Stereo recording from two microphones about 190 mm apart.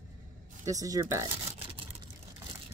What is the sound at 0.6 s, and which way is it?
Speech, 15° right (ahead or behind).